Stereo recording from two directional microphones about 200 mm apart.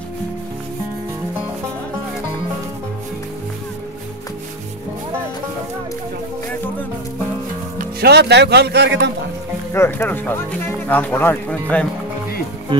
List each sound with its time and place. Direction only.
7.8 s speech: 55° right (ahead or behind)
9.7 s speech: 10° left (ahead or behind)